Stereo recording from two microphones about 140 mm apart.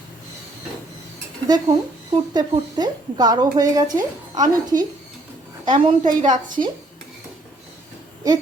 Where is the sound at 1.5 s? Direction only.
30° right (ahead or behind).